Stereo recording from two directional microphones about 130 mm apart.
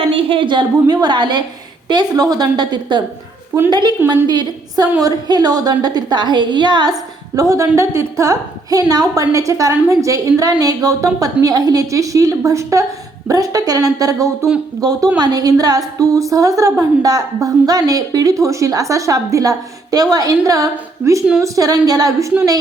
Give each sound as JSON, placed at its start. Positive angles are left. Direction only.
{"t": 0.0, "sound": "a woman's voice", "side_deg": -45}